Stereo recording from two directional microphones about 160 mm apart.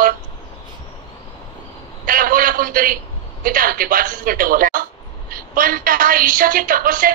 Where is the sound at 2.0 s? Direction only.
60° right (ahead or behind).